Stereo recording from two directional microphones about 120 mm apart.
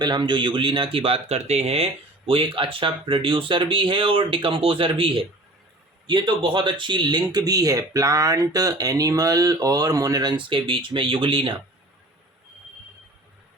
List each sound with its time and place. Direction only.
0.0 s speech: 40° right (ahead or behind)